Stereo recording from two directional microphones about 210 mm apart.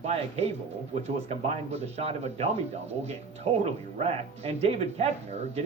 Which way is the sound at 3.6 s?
30° right (ahead or behind).